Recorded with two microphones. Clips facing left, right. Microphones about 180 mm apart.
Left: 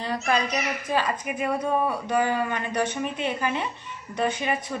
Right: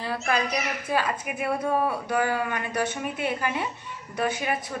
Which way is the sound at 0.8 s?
10° right (ahead or behind).